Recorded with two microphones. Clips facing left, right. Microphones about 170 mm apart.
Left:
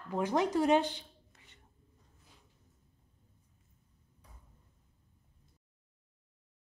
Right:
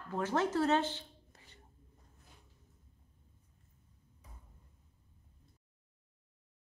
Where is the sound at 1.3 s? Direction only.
35° right (ahead or behind).